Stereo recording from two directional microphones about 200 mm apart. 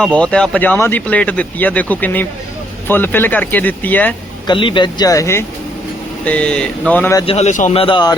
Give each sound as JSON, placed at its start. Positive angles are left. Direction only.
{"t": 0.0, "sound": "speech", "side_deg": 5}
{"t": 4.4, "sound": "speech", "side_deg": 25}
{"t": 7.3, "sound": "speech", "side_deg": 35}